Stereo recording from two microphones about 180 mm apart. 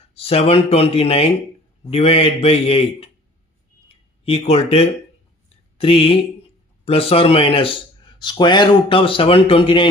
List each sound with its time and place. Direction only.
0.1 s speech: 35° left (ahead or behind)
3.8 s a sound: 35° left (ahead or behind)
5.7 s speech: 30° left (ahead or behind)